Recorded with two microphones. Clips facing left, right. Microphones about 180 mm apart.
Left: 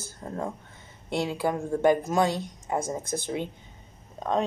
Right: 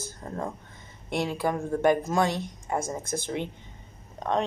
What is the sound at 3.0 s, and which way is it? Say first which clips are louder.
Speech: even; 15° right (ahead or behind).